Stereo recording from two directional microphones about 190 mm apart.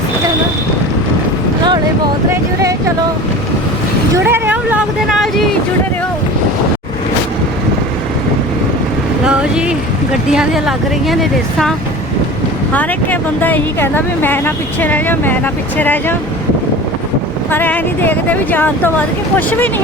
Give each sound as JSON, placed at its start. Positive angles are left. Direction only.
{"t": 2.3, "sound": "speech", "side_deg": -15}
{"t": 4.1, "sound": "speech", "side_deg": -10}
{"t": 9.2, "sound": "speech", "side_deg": -5}
{"t": 12.7, "sound": "speech", "side_deg": 10}
{"t": 17.5, "sound": "speech", "side_deg": 10}